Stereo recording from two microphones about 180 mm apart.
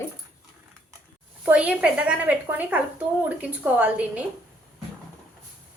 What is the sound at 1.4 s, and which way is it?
A woman's voice, 5° right (ahead or behind).